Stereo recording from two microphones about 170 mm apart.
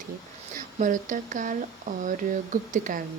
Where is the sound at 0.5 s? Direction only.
50° right (ahead or behind).